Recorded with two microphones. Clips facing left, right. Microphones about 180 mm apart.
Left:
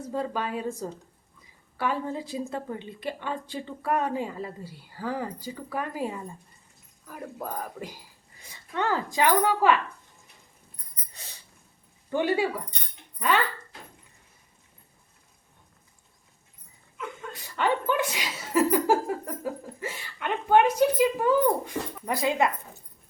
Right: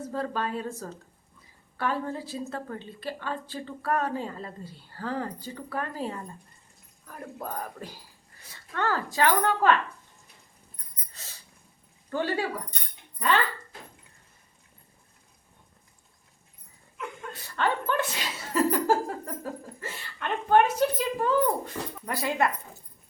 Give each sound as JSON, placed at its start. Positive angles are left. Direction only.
{"t": 0.1, "sound": "a woman's voice", "side_deg": 15}
{"t": 12.1, "sound": "a woman's voice", "side_deg": 15}
{"t": 17.3, "sound": "chuckle", "side_deg": 15}
{"t": 19.8, "sound": "a woman's voice", "side_deg": 10}